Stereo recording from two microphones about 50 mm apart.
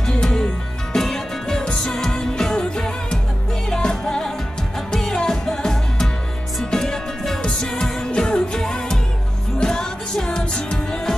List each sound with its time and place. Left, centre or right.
0.0 s music: centre